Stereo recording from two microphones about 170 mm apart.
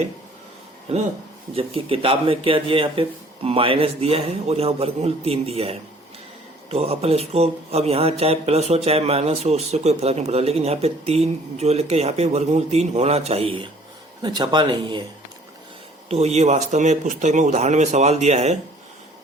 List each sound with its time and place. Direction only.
0.9 s speech: 35° right (ahead or behind)
16.0 s speech: 40° right (ahead or behind)